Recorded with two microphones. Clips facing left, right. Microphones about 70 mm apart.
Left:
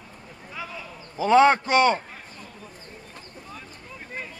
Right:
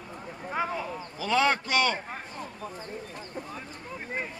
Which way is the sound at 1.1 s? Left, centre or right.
Left.